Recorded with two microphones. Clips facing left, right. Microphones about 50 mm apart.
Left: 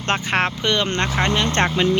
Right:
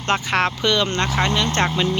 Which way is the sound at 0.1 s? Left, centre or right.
Left.